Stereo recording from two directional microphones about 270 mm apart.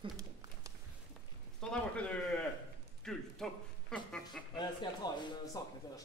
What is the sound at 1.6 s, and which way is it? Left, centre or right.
A man's voice, centre.